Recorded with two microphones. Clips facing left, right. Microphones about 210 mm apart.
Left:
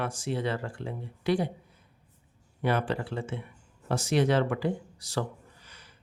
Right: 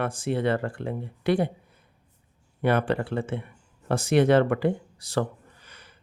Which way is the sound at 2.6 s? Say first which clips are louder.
Right 5 dB; 55° right (ahead or behind).